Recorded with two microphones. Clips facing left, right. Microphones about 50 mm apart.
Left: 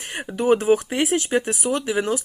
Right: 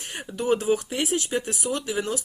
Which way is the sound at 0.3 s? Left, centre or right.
Left.